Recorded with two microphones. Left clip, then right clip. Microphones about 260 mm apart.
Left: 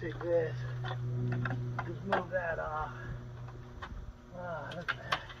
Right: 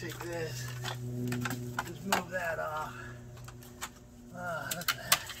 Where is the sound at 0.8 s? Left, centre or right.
Right.